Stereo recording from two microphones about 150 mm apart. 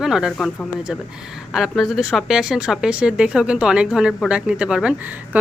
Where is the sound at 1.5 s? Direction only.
Centre (ahead or behind).